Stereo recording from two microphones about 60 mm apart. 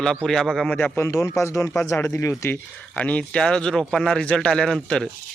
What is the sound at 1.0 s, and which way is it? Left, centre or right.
Speech, left.